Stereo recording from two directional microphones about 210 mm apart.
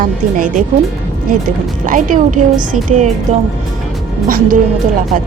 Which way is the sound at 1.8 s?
40° right (ahead or behind).